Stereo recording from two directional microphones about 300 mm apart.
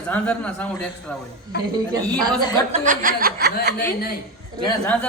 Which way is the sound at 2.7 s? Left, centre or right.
Right.